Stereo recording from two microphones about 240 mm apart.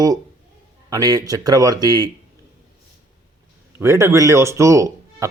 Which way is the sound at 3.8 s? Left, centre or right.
Centre.